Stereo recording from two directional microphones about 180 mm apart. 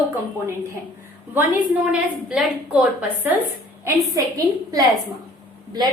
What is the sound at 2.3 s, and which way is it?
A woman's voice, 5° right (ahead or behind).